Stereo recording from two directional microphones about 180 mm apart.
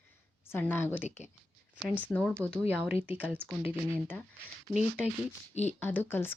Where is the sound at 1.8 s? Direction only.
10° right (ahead or behind).